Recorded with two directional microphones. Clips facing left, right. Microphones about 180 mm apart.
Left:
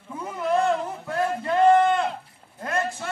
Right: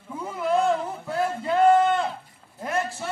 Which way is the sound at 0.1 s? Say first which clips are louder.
Even; centre (ahead or behind).